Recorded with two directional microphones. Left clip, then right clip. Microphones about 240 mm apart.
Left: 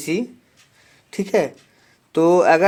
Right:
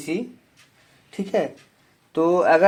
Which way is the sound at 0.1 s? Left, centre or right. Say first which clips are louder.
Left 4 dB; left.